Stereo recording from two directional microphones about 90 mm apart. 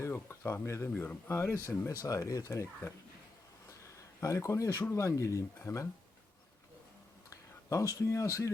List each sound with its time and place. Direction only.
0.0 s speech: 30° left (ahead or behind)
7.3 s speech: 35° left (ahead or behind)